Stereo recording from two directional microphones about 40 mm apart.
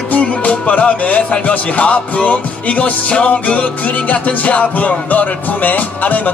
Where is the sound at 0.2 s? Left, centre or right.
Left.